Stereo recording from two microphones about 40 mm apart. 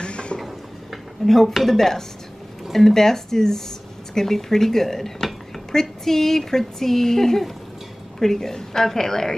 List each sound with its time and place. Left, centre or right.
0.0 s a sound: left
1.2 s dishes: centre
2.7 s a woman's voice: centre